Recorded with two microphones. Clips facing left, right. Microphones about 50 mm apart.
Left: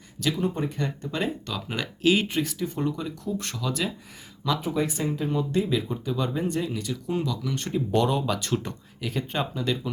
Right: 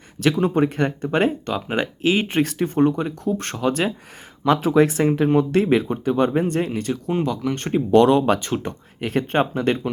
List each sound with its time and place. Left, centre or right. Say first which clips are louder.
0.2 s speech: right 8 dB; right
1.5 s speech: right 8 dB; right
2.3 s speech: right 7 dB; right
4.6 s speech: right 10 dB; right
7.9 s speech: right 10 dB; right
8.4 s speech: right 3 dB; right
9.0 s speech: right 9 dB; right